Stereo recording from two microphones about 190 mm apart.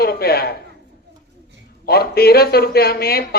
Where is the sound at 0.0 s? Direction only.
55° left (ahead or behind).